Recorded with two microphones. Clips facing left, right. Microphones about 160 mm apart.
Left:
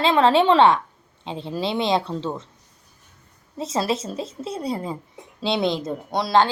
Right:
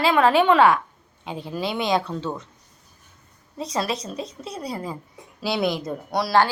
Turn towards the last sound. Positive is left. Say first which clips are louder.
# left 1 dB
turn(degrees=20)  # may be behind; listen again after turning